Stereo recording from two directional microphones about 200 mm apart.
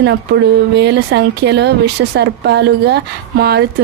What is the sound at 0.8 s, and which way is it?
Speech, 55° right (ahead or behind).